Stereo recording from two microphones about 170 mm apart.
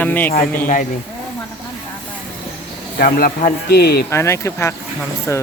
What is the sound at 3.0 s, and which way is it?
Speech, 55° left (ahead or behind).